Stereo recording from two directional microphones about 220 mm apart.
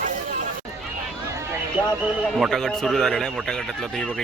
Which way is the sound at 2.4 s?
Centre (ahead or behind).